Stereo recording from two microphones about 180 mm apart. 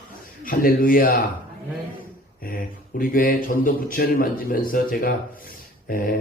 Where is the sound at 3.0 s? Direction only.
50° left (ahead or behind).